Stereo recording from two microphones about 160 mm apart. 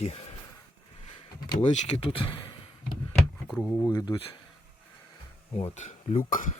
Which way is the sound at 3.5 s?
5° left (ahead or behind).